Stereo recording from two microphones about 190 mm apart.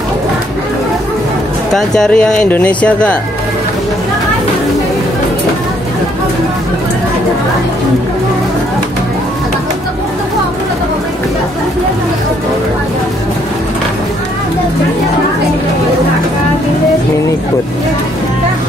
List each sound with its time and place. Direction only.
1.7 s speech: centre (ahead or behind)